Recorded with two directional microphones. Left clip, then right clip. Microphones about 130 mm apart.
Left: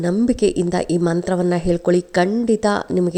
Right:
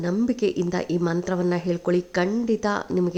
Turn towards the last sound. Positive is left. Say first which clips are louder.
# left 6 dB
turn(degrees=40)  # may be behind; listen again after turning